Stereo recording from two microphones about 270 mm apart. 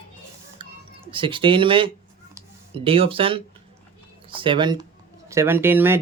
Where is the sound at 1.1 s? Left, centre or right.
Centre.